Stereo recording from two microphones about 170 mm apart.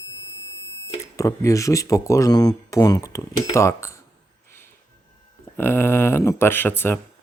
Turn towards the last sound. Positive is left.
turn(degrees=15)  # may be behind; listen again after turning